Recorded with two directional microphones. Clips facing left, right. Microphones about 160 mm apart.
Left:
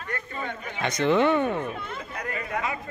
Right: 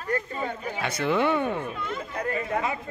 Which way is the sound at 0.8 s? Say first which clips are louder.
Left 3 dB; 10° right (ahead or behind).